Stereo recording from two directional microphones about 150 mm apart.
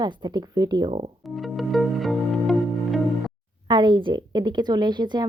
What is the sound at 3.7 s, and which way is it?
Speech, 30° right (ahead or behind).